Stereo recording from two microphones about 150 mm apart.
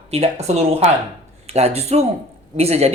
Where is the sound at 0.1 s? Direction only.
45° right (ahead or behind).